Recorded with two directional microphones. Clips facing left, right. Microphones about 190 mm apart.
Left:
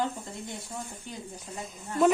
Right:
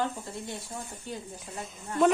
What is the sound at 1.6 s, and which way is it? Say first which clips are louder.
Speech: even; centre (ahead or behind).